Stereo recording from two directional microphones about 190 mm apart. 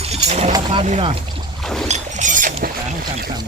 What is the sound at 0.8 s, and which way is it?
Speech, 30° right (ahead or behind).